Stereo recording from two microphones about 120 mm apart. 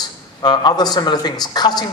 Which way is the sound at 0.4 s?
35° left (ahead or behind).